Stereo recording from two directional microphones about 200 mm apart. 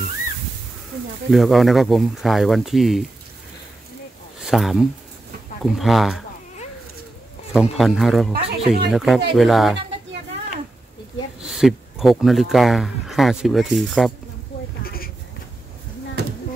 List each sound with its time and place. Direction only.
1.3 s speech: centre (ahead or behind)
4.5 s speech: centre (ahead or behind)
7.5 s speech: centre (ahead or behind)
8.3 s speech: 55° right (ahead or behind)
8.9 s speech: centre (ahead or behind)
11.4 s speech: centre (ahead or behind)
14.8 s a sound: 50° left (ahead or behind)